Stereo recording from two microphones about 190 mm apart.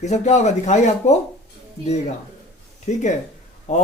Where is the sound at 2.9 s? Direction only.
40° left (ahead or behind).